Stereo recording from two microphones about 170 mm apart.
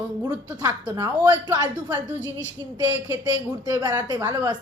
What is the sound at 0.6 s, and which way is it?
A woman's voice, 20° right (ahead or behind).